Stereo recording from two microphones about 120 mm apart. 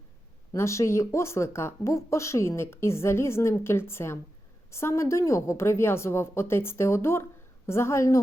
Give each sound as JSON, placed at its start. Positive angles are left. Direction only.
{"t": 0.5, "sound": "speech", "side_deg": 25}